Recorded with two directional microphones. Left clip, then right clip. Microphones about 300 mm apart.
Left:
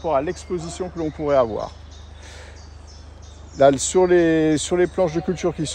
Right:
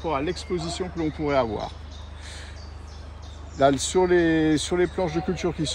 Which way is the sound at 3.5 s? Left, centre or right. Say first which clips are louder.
Left 5 dB; left.